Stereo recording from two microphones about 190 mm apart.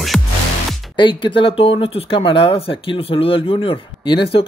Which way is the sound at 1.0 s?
25° left (ahead or behind).